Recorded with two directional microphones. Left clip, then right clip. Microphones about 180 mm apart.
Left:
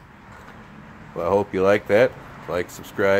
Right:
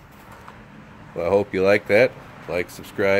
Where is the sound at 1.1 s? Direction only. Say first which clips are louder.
Right 1 dB; 5° right (ahead or behind).